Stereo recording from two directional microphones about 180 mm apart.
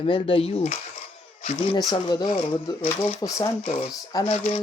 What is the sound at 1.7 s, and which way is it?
Speech, 20° left (ahead or behind).